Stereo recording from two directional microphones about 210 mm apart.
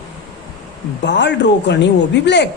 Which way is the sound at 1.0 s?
55° left (ahead or behind).